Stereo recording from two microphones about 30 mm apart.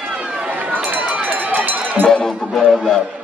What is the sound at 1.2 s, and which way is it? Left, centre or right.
Run, right.